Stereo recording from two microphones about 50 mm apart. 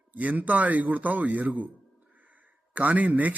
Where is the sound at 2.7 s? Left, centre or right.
Right.